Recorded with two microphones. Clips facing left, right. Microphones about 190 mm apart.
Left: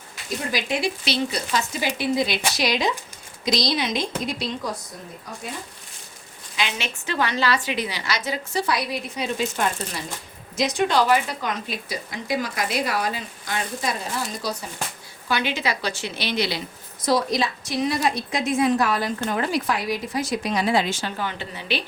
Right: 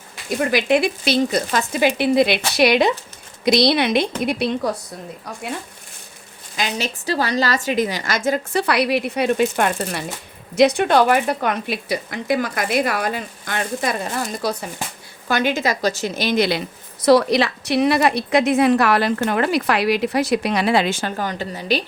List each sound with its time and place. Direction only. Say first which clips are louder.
0.3 s speech: right 9 dB; 65° right (ahead or behind)
6.6 s a woman's voice: right 4 dB; 40° right (ahead or behind)